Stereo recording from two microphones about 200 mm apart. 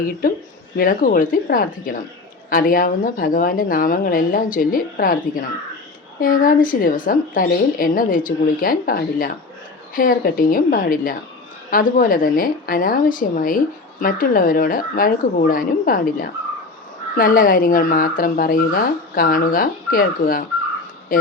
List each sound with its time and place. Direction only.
0.8 s a woman's voice: 45° left (ahead or behind)